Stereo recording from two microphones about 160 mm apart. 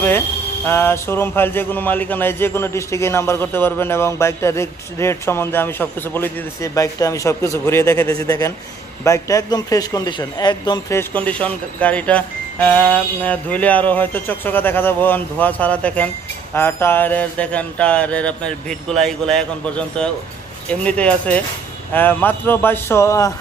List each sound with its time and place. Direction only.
0.7 s a man's voice: 15° left (ahead or behind)